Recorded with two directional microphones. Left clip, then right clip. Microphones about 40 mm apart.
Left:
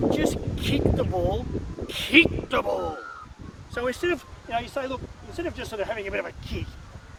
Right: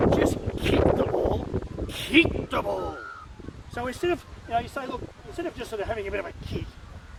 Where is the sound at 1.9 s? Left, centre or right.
Left.